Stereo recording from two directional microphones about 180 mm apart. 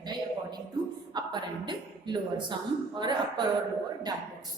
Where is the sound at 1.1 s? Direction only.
25° right (ahead or behind).